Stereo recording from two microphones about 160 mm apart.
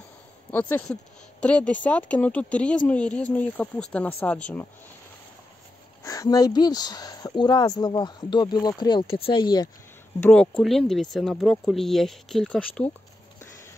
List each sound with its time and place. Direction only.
0.5 s speech: 10° left (ahead or behind)
6.0 s speech: 20° left (ahead or behind)
10.2 s speech: 5° left (ahead or behind)